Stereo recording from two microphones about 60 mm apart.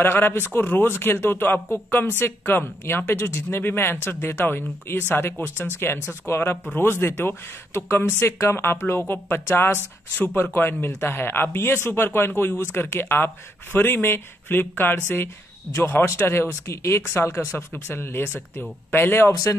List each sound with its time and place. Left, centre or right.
0.0 s speech: left
3.2 s speech: left